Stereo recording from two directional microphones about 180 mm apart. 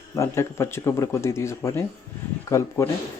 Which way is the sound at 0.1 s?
15° left (ahead or behind).